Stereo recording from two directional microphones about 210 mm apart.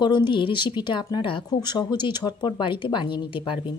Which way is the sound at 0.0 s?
20° left (ahead or behind).